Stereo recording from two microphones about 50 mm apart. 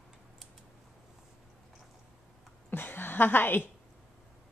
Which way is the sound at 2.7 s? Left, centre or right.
Left.